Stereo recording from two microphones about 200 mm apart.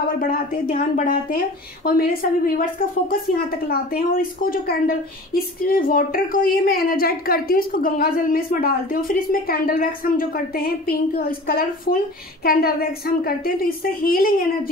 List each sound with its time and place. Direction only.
0.2 s a woman's voice: 45° left (ahead or behind)